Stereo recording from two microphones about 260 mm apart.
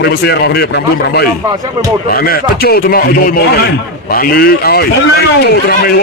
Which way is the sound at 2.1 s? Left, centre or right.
Left.